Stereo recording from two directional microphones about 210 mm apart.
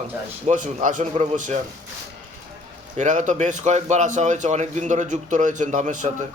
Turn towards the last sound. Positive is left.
turn(degrees=-35)  # may be behind; listen again after turning